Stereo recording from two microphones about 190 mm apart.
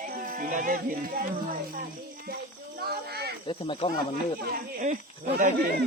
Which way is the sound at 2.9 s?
55° right (ahead or behind).